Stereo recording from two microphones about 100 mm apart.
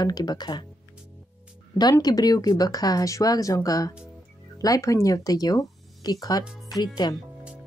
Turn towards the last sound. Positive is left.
turn(degrees=45)  # may be behind; listen again after turning